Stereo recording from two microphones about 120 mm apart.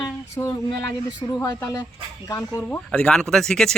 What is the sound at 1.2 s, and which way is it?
Speech, 40° left (ahead or behind).